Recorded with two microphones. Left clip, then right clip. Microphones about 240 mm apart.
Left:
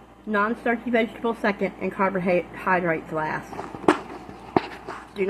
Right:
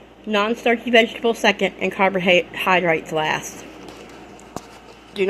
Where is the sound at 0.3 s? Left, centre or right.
Right.